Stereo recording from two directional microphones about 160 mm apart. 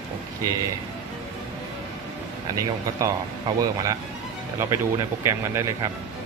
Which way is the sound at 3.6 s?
20° right (ahead or behind).